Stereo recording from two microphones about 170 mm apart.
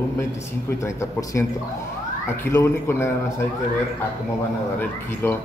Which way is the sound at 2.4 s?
15° left (ahead or behind).